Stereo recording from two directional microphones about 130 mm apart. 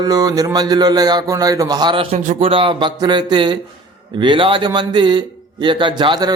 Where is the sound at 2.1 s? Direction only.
60° right (ahead or behind).